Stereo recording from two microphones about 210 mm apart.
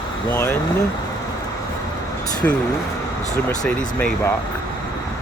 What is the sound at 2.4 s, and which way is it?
Speech, 10° left (ahead or behind).